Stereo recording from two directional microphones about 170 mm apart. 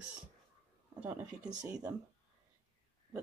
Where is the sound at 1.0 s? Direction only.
10° right (ahead or behind).